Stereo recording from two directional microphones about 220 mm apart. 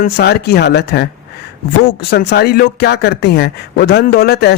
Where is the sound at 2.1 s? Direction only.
45° left (ahead or behind).